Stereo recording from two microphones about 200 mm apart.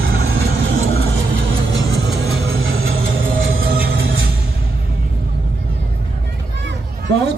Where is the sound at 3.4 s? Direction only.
75° right (ahead or behind).